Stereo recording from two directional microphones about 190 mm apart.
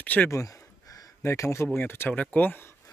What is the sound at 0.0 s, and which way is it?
Speech, 10° left (ahead or behind).